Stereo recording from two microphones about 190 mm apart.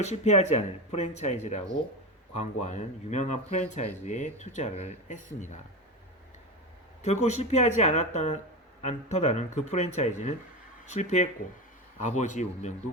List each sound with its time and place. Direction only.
0.0 s speech: 35° left (ahead or behind)
7.0 s speech: 35° left (ahead or behind)